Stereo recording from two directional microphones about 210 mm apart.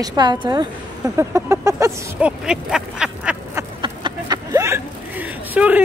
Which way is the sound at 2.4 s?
5° right (ahead or behind).